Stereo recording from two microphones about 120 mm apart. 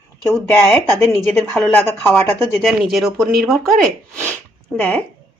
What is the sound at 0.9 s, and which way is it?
Speech, 20° left (ahead or behind).